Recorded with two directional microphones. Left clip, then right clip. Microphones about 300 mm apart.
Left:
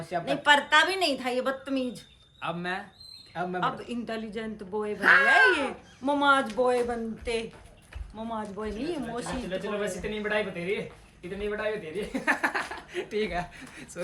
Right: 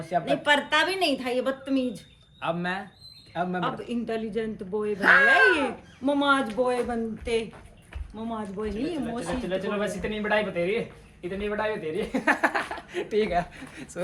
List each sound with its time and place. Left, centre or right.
0.1 s speech: centre
9.2 s speech: centre